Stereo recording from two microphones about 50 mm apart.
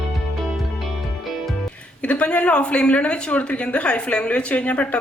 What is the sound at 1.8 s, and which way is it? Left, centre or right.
A woman's voice, left.